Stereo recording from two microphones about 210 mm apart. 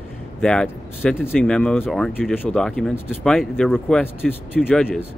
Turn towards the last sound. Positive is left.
turn(degrees=5)  # may be behind; listen again after turning